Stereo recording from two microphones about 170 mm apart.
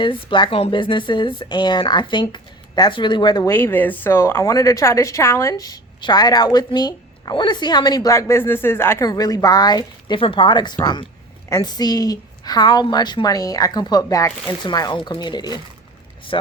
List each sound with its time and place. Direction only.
0.0 s a woman's voice: 30° left (ahead or behind)
3.5 s a woman's voice: 10° left (ahead or behind); by 16.5 s 30° left (ahead or behind)